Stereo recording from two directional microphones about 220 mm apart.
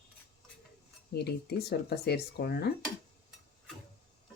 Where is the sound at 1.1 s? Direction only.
45° left (ahead or behind).